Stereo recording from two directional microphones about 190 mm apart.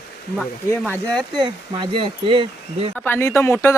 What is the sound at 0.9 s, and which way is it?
Speech, 5° left (ahead or behind).